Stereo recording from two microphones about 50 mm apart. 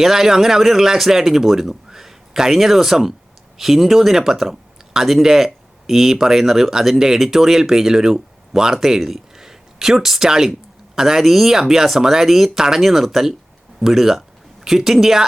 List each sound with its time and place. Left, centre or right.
0.0 s speech: centre